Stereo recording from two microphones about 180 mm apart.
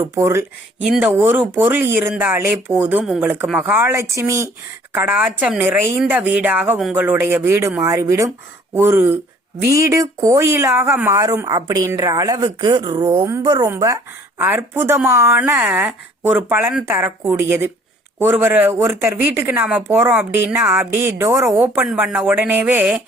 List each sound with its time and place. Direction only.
0.1 s speech: 15° right (ahead or behind)
0.9 s speech: 5° right (ahead or behind)